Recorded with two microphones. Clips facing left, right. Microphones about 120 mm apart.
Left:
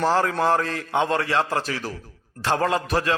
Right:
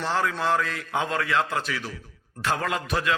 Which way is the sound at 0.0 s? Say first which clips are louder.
Left 5 dB; 40° left (ahead or behind).